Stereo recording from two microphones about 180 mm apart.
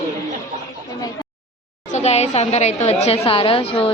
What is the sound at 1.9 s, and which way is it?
A woman's voice, 40° left (ahead or behind).